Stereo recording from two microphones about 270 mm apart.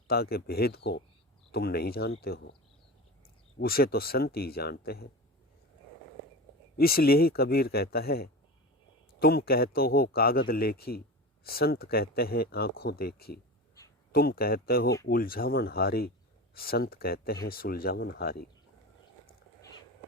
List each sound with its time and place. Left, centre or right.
0.1 s speech: left
3.6 s speech: left
6.7 s speech: left